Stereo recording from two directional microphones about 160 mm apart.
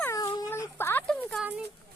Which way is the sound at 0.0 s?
15° left (ahead or behind).